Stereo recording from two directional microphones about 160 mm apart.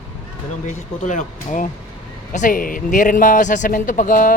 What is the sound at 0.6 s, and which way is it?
Speech, 50° left (ahead or behind).